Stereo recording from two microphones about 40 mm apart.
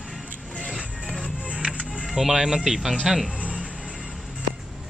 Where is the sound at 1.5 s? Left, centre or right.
Right.